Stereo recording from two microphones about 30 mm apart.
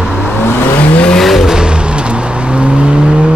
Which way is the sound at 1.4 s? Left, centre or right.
Right.